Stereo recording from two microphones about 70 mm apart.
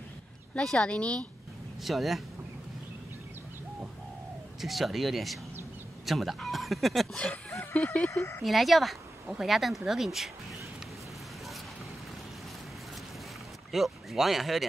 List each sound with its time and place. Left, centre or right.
0.6 s speech: centre
1.9 s speech: centre
4.6 s speech: centre
7.2 s speech: centre
8.1 s speech: left
8.5 s speech: centre
13.7 s speech: centre